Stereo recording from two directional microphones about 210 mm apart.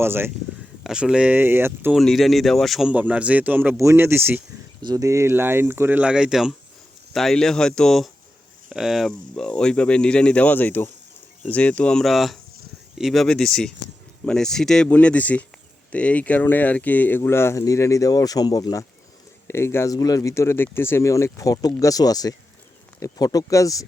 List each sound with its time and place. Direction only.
0.0 s a man's voice: 10° right (ahead or behind)
2.0 s a man's voice: centre (ahead or behind)